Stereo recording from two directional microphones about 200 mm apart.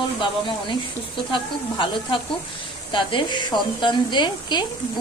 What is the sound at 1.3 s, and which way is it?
Speech, 25° left (ahead or behind).